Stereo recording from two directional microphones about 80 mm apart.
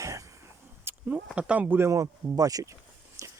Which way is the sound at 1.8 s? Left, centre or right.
Right.